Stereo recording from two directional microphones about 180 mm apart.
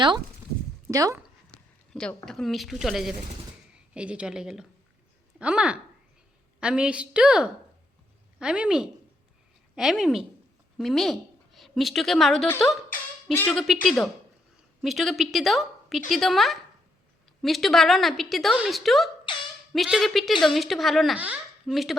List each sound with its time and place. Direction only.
0.9 s speech: 20° right (ahead or behind)
1.9 s a woman's voice: 5° left (ahead or behind)